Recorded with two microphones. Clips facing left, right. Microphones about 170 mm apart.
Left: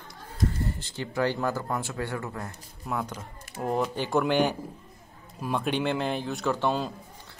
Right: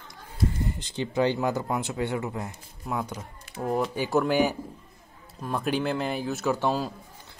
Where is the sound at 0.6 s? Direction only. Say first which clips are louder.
Right 2 dB; 20° right (ahead or behind).